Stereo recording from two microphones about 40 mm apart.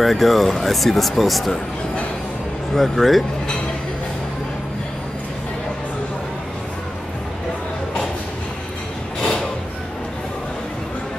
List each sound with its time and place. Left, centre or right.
0.0 s speech: centre
2.7 s speech: centre
9.2 s a sound: left